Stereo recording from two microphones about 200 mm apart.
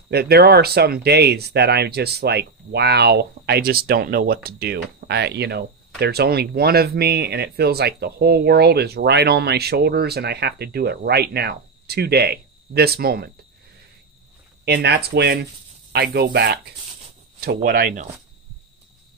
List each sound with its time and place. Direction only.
0.1 s speech: 55° right (ahead or behind)
14.6 s speech: 55° right (ahead or behind)